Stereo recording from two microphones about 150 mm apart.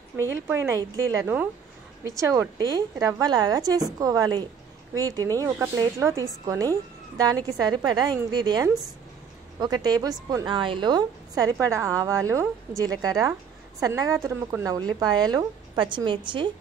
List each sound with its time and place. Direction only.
0.2 s a woman's voice: 15° right (ahead or behind)